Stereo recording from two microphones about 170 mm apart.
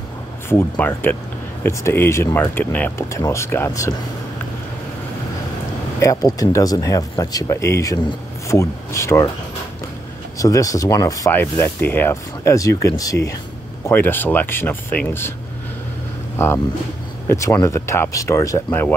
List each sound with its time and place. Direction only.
0.5 s speech: 10° left (ahead or behind)
5.9 s speech: 20° left (ahead or behind)
10.4 s speech: 20° left (ahead or behind)
16.3 s speech: 15° left (ahead or behind)